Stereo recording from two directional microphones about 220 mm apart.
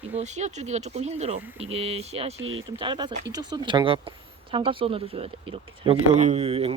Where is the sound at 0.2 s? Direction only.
30° right (ahead or behind).